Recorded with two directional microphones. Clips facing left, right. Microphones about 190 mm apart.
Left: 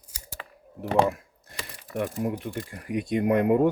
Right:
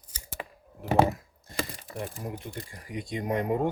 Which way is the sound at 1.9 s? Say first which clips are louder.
Left 8 dB; 70° left (ahead or behind).